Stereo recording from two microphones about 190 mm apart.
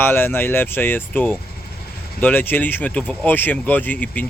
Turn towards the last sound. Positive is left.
turn(degrees=10)  # may be behind; listen again after turning